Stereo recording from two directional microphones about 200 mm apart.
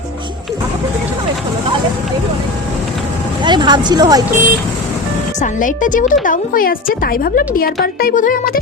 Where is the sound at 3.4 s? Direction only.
20° right (ahead or behind).